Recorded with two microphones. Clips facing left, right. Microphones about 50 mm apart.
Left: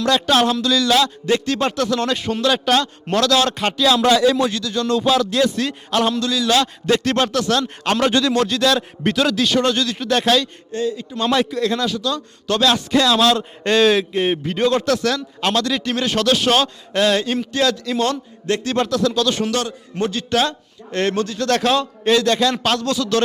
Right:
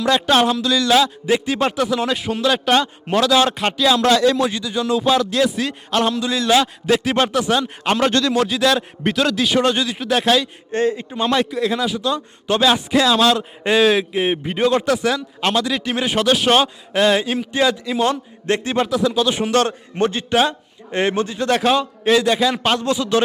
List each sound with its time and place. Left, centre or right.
0.0 s a man's voice: centre
4.5 s speech: centre
6.2 s a man's voice: centre
6.8 s a man's voice: centre
9.5 s a man's voice: centre
10.7 s a man's voice: right
11.2 s a man's voice: centre
11.9 s a man's voice: centre
18.8 s a man's voice: centre
19.5 s a man's voice: right; by 23.2 s centre